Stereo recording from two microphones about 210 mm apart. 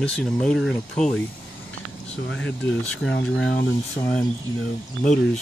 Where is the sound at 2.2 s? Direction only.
65° left (ahead or behind).